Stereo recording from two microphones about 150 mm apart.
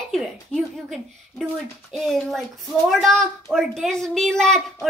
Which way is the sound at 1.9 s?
Centre (ahead or behind).